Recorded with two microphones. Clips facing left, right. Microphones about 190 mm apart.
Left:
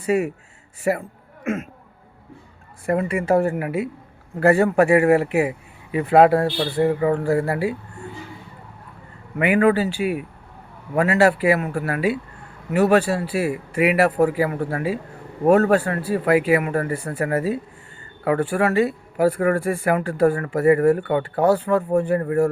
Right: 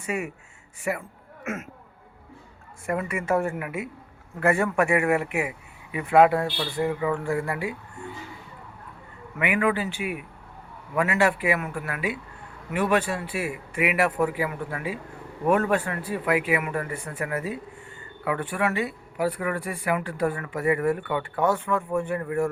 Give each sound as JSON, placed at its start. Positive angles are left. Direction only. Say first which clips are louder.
{"t": 0.0, "sound": "speech", "louder": "left 9 dB", "side_deg": 35}
{"t": 2.8, "sound": "speech", "louder": "left 6 dB", "side_deg": 35}
{"t": 9.4, "sound": "speech", "louder": "left 7 dB", "side_deg": 40}